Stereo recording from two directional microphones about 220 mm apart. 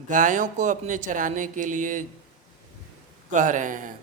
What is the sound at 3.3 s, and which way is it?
Speech, 35° right (ahead or behind).